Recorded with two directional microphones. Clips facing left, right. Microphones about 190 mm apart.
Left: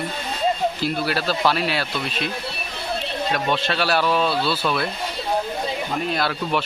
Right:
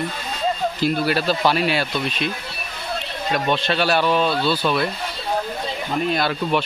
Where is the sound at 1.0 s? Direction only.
Centre (ahead or behind).